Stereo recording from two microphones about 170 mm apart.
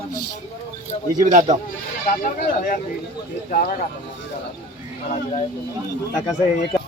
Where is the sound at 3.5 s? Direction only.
55° left (ahead or behind).